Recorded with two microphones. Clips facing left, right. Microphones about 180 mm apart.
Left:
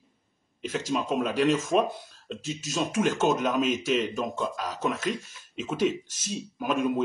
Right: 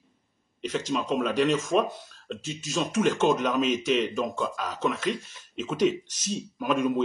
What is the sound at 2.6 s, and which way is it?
Speech, 45° left (ahead or behind).